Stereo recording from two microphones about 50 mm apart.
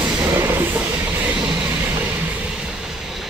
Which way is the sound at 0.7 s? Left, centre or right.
Right.